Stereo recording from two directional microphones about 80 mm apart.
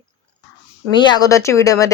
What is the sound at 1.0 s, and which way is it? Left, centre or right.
Speech, left.